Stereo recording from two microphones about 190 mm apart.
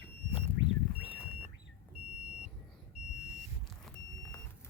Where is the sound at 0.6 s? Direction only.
90° right.